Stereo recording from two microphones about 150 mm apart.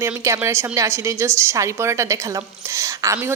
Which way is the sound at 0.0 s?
20° right (ahead or behind).